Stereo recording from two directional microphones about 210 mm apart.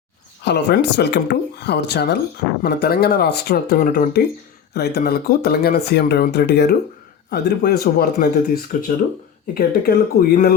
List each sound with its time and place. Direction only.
0.4 s speech: 55° left (ahead or behind)